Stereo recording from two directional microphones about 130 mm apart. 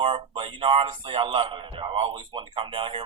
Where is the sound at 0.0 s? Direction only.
45° right (ahead or behind).